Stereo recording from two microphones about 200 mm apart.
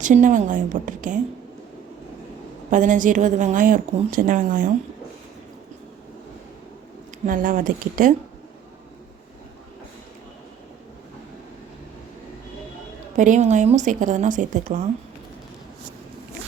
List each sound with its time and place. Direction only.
0.0 s a woman's voice: 40° right (ahead or behind)
2.6 s a woman's voice: 40° right (ahead or behind)
7.3 s speech: 45° right (ahead or behind)
13.1 s a woman's voice: 40° right (ahead or behind)